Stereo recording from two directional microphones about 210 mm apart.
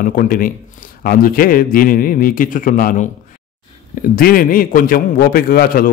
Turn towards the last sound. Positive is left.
turn(degrees=45)  # may be behind; listen again after turning